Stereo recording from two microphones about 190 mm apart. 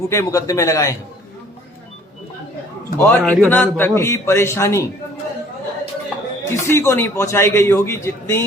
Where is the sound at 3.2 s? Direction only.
Centre (ahead or behind).